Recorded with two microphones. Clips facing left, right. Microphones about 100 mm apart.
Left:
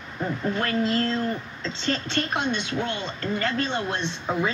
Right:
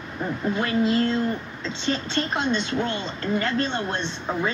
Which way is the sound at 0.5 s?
15° right (ahead or behind).